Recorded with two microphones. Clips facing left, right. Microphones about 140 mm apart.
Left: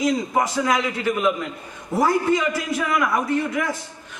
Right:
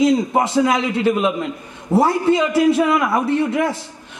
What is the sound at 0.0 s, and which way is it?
A man's voice, 25° right (ahead or behind).